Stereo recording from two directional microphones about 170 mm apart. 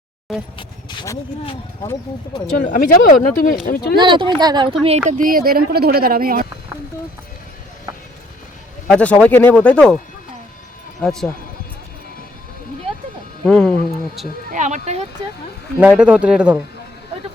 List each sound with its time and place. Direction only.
0.5 s vehicle: 25° left (ahead or behind)
2.6 s speech: 55° left (ahead or behind)
3.9 s speech: 30° right (ahead or behind)
4.8 s speech: 40° right (ahead or behind); by 6.5 s 60° right (ahead or behind)
8.9 s speech: 10° left (ahead or behind)
11.0 s speech: centre (ahead or behind)
13.4 s speech: 5° left (ahead or behind)
14.5 s speech: 45° right (ahead or behind)
15.8 s speech: 10° right (ahead or behind)